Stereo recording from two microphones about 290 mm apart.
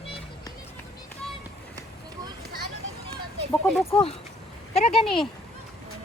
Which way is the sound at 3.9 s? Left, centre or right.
Centre.